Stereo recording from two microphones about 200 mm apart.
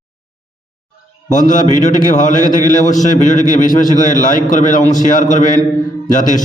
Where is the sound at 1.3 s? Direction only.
40° left (ahead or behind).